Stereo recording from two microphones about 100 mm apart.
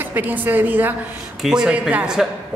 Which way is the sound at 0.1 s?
20° right (ahead or behind).